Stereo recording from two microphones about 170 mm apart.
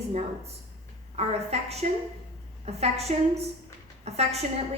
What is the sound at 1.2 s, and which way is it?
A woman's voice, 40° right (ahead or behind).